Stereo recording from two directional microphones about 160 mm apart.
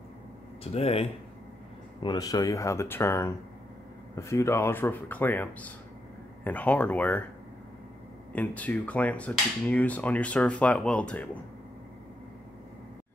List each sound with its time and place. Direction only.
0.7 s speech: 40° left (ahead or behind)
2.0 s speech: 20° left (ahead or behind)
8.3 s speech: 10° left (ahead or behind)